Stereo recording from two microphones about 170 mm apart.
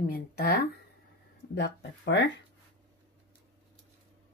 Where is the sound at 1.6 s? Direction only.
90° left.